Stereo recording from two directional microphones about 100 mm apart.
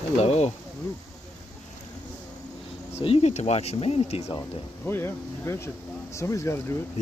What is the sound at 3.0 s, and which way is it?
Speech, 75° left (ahead or behind).